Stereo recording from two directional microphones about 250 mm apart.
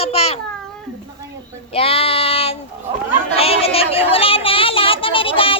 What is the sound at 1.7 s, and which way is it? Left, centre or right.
Child singing, left.